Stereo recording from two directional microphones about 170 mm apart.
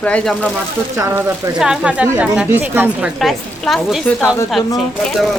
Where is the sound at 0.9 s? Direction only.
15° right (ahead or behind).